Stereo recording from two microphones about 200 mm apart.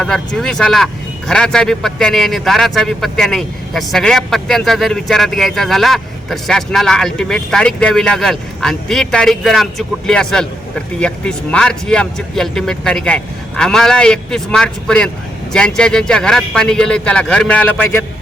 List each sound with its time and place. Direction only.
0.0 s a man's voice: 5° left (ahead or behind)